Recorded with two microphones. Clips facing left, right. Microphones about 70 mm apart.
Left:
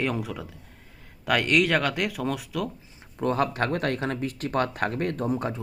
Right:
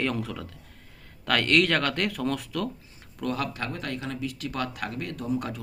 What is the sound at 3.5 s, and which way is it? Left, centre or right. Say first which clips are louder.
A man's voice: left 7 dB; left.